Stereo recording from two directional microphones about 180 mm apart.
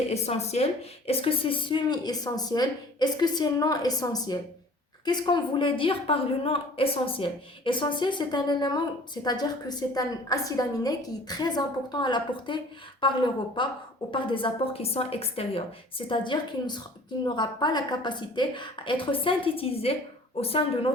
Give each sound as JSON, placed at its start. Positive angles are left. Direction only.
{"t": 0.1, "sound": "a woman's voice", "side_deg": 35}